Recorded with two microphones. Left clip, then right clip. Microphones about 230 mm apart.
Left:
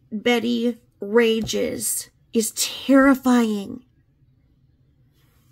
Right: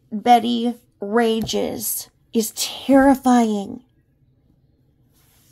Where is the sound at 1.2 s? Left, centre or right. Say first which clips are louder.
Even; centre.